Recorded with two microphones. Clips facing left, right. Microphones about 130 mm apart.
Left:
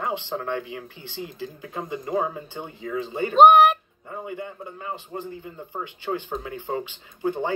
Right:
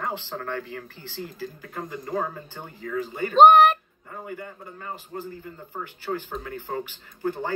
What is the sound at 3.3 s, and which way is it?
Speech, 10° left (ahead or behind).